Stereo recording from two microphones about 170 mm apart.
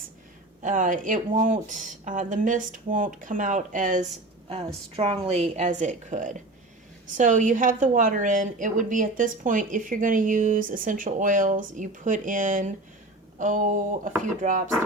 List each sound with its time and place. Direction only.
0.6 s a woman's voice: 50° right (ahead or behind)
4.9 s a woman's voice: 35° right (ahead or behind); by 14.6 s 50° right (ahead or behind)